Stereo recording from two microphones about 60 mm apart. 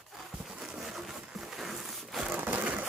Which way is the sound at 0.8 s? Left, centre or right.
Centre.